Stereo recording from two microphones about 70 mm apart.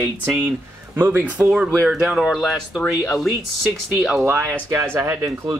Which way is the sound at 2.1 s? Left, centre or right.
Centre.